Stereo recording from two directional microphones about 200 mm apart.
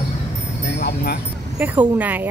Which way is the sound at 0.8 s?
55° left (ahead or behind).